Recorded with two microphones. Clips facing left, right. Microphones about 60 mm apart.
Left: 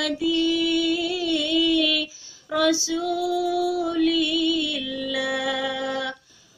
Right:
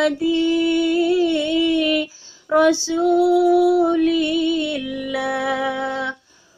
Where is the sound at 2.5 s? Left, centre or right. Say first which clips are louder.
Right 6 dB; right.